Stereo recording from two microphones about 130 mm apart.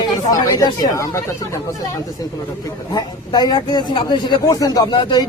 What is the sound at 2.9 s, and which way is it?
Speech, 30° left (ahead or behind).